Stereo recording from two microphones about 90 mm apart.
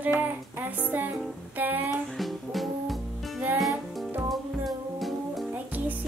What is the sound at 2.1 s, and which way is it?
Music, centre (ahead or behind).